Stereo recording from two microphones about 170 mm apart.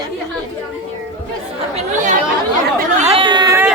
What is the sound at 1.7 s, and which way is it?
Chatter, 45° right (ahead or behind).